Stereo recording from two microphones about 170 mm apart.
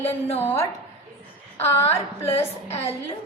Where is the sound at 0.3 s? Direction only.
15° left (ahead or behind).